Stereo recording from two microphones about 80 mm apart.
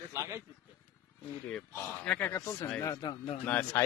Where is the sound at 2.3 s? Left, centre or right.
Left.